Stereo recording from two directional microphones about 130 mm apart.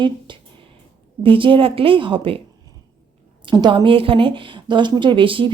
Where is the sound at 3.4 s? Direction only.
35° right (ahead or behind).